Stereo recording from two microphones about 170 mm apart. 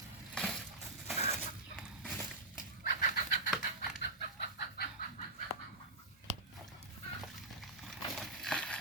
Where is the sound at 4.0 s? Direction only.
70° left (ahead or behind).